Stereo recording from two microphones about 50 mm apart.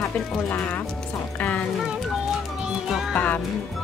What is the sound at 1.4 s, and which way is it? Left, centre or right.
Speech, left.